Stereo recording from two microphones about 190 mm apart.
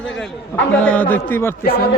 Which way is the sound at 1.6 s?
50° left (ahead or behind).